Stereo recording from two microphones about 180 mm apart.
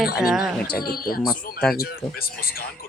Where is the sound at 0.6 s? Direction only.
55° left (ahead or behind).